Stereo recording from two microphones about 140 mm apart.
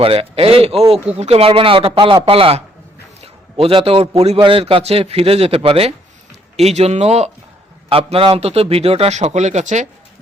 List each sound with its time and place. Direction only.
0.0 s a man's voice: 40° right (ahead or behind)